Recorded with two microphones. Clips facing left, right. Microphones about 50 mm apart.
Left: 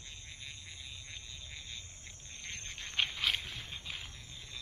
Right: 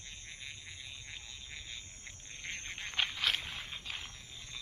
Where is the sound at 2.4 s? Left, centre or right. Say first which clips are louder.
Right 3 dB; centre.